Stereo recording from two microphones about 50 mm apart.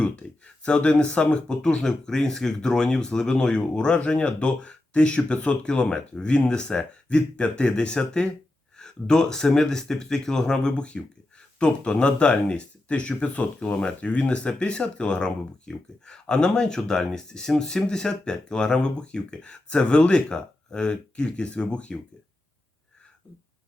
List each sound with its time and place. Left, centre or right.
0.0 s speech: left